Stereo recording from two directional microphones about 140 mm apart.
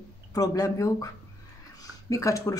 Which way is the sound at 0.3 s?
25° left (ahead or behind).